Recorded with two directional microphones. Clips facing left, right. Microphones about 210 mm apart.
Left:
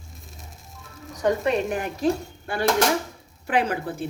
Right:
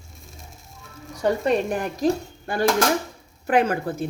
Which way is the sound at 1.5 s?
40° right (ahead or behind).